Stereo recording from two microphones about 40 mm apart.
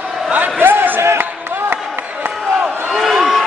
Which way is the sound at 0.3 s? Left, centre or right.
Right.